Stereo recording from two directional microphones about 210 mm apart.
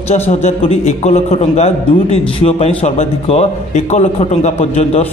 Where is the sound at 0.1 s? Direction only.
30° left (ahead or behind).